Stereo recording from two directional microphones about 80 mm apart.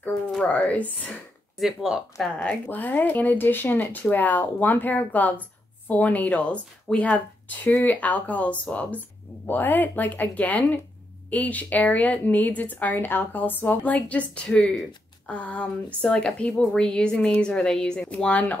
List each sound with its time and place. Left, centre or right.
0.4 s speech: centre
1.6 s speech: centre
2.3 s speech: centre
2.8 s speech: left